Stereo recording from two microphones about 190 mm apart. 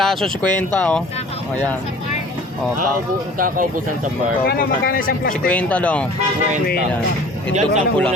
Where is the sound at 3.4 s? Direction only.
45° right (ahead or behind).